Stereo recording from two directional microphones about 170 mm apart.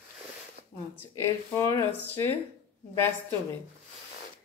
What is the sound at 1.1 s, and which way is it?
Speech, 20° left (ahead or behind).